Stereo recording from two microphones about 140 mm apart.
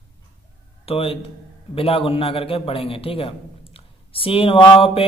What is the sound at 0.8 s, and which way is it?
Speech, 45° left (ahead or behind).